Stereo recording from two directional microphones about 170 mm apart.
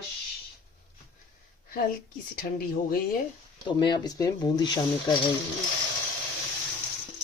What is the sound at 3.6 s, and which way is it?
Speech, 25° left (ahead or behind).